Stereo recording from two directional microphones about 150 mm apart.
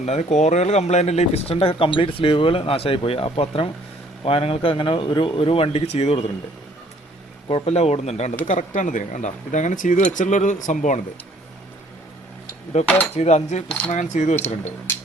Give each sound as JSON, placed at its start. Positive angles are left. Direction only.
{"t": 0.0, "sound": "speech", "side_deg": 50}
{"t": 7.4, "sound": "speech", "side_deg": 40}
{"t": 13.1, "sound": "speech", "side_deg": 45}
{"t": 13.7, "sound": "speech", "side_deg": 10}
{"t": 13.9, "sound": "speech", "side_deg": 55}